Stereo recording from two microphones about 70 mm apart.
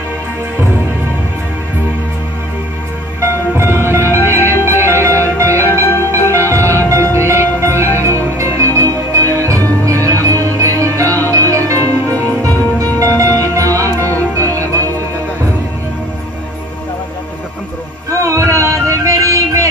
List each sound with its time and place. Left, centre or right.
3.2 s music: right
18.2 s music: right